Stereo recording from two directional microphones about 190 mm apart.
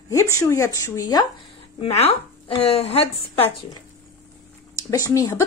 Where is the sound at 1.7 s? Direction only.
30° left (ahead or behind).